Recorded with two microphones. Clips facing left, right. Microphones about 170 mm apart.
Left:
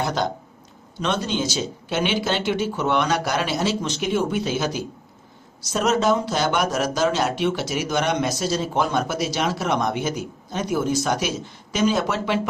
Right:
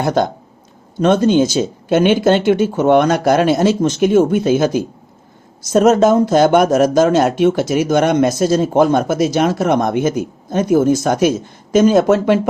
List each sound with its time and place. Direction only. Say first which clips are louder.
0.0 s speech: right 8 dB; 50° right (ahead or behind)